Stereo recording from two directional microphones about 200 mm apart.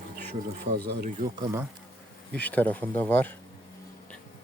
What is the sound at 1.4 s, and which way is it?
Speech, 15° right (ahead or behind).